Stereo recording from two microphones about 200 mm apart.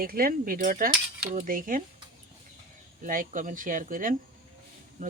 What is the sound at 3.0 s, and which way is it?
Speech, 40° right (ahead or behind).